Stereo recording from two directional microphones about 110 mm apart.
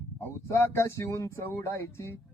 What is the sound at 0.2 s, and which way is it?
Speech, 20° left (ahead or behind).